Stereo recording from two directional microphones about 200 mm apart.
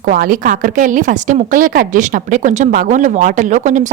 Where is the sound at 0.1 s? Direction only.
45° right (ahead or behind).